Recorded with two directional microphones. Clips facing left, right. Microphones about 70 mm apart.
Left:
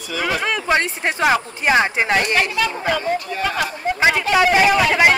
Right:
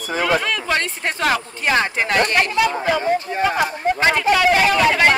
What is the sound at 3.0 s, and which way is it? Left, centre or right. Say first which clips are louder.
Speech: right 3 dB; right.